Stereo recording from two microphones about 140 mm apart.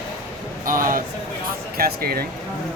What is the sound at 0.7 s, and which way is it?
Speech, 80° right.